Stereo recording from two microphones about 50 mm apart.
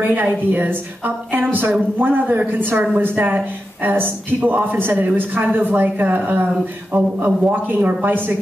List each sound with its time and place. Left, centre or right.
0.0 s a woman's voice: right